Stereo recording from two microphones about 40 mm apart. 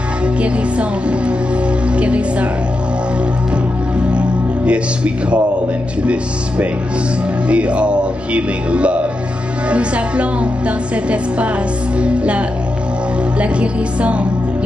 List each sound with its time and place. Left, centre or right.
0.4 s speech: right
4.6 s speech: right
7.4 s music: right
9.7 s speech: right